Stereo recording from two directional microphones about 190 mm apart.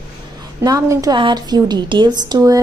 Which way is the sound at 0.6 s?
20° right (ahead or behind).